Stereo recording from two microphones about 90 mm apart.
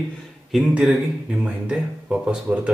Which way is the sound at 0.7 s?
10° right (ahead or behind).